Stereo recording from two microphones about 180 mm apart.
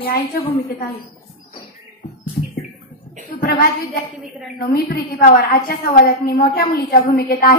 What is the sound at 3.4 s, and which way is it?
A woman's voice, 60° left (ahead or behind).